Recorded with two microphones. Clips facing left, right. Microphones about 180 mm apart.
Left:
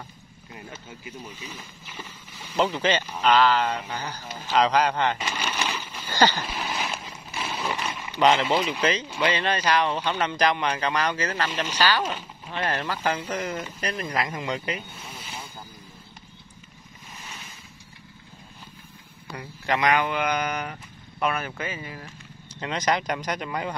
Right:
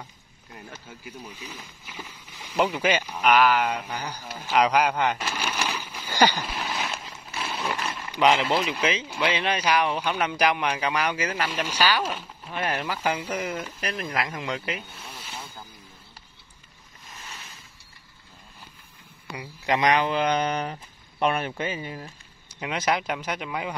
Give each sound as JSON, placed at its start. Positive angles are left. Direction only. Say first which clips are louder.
{"t": 0.5, "sound": "speech", "louder": "left 1 dB", "side_deg": 0}
{"t": 1.9, "sound": "speech", "louder": "right 1 dB", "side_deg": -10}
{"t": 6.0, "sound": "a sound", "louder": "even", "side_deg": -10}
{"t": 6.4, "sound": "a sound", "louder": "even", "side_deg": 0}
{"t": 8.1, "sound": "speech", "louder": "left 1 dB", "side_deg": -5}
{"t": 19.3, "sound": "speech", "louder": "right 1 dB", "side_deg": -20}
{"t": 22.5, "sound": "speech", "louder": "left 1 dB", "side_deg": -10}